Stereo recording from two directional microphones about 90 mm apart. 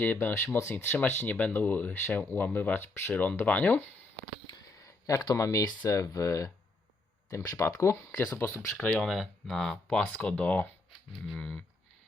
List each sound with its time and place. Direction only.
0.0 s speech: 20° left (ahead or behind)
4.4 s speech: 45° left (ahead or behind); by 8.7 s 30° left (ahead or behind)
9.0 s speech: 5° left (ahead or behind)